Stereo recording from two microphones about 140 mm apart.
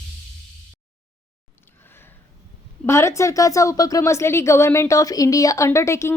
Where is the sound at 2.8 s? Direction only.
20° left (ahead or behind).